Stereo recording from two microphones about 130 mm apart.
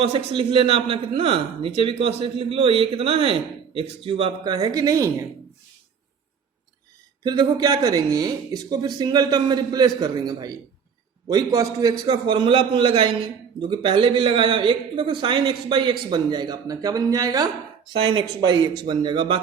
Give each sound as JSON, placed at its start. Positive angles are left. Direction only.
{"t": 0.0, "sound": "a man's voice", "side_deg": -45}
{"t": 7.3, "sound": "a man's voice", "side_deg": -35}